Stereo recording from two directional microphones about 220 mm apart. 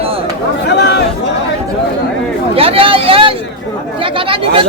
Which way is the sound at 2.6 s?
25° right (ahead or behind).